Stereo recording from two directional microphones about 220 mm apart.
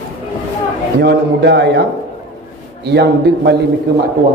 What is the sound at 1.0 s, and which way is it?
Speech, 50° right (ahead or behind).